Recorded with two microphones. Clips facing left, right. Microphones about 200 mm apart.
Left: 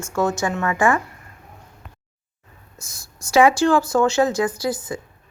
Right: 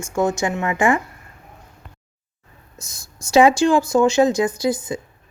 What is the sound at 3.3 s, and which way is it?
Speech, 20° right (ahead or behind).